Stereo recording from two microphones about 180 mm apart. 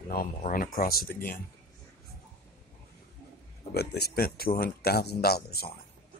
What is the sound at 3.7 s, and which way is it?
Speech, 60° left (ahead or behind).